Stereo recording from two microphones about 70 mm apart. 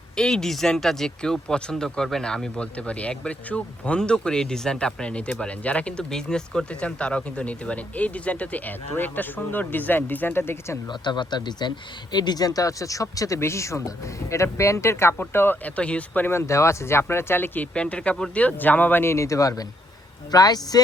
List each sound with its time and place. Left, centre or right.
0.2 s speech: centre; by 10.8 s left
10.8 s speech: left
15.6 s speech: centre
16.3 s speech: left
17.7 s speech: centre
19.1 s speech: left
20.3 s speech: left